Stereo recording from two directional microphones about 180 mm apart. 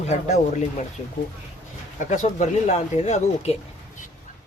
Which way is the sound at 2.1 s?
45° left (ahead or behind).